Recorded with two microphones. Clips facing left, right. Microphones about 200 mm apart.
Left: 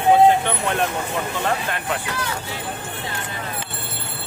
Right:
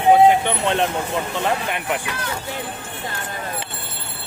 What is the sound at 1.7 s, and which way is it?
Speech, 15° right (ahead or behind).